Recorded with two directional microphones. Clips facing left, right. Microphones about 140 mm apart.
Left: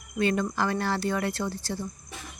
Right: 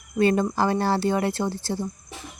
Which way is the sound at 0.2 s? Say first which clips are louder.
Right 5 dB; 35° right (ahead or behind).